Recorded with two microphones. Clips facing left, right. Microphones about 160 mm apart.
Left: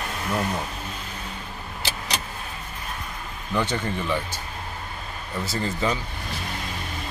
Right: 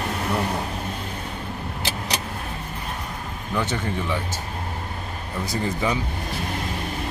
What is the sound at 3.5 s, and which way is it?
Speech, 10° right (ahead or behind).